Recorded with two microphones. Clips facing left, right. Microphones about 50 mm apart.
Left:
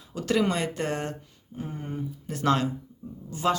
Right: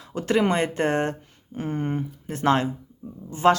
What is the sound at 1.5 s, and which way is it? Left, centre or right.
Speech, right.